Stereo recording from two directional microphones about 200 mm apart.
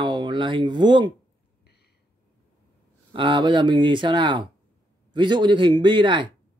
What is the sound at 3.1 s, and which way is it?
Speech, 25° right (ahead or behind).